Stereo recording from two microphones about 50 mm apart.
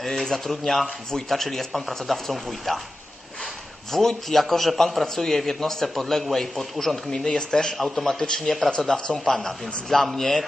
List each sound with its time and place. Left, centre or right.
0.0 s a man's voice: centre
3.9 s a man's voice: centre
8.4 s a man's voice: centre